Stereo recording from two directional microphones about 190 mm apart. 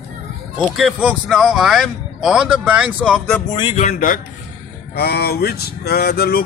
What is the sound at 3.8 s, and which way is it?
Speech, 40° left (ahead or behind).